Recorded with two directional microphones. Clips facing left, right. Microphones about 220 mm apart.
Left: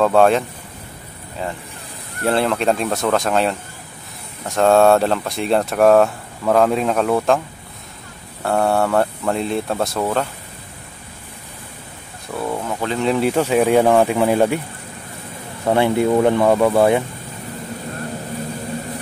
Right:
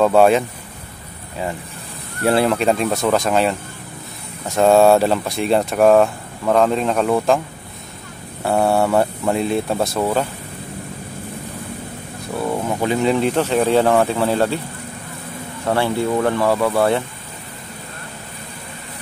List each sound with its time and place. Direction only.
0.0 s speech: 5° right (ahead or behind)
2.2 s speech: 5° right (ahead or behind)
4.6 s speech: 5° right (ahead or behind)
8.5 s speech: 5° right (ahead or behind)
12.4 s a sound: 10° right (ahead or behind)
13.0 s speech: 5° left (ahead or behind)
15.6 s speech: 20° left (ahead or behind)